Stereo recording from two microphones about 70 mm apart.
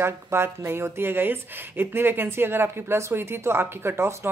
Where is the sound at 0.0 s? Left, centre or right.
Right.